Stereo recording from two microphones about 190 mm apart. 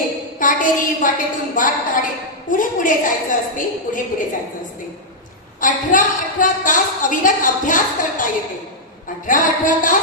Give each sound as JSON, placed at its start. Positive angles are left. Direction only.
{"t": 0.4, "sound": "a woman's voice", "side_deg": 45}
{"t": 5.6, "sound": "a woman's voice", "side_deg": 45}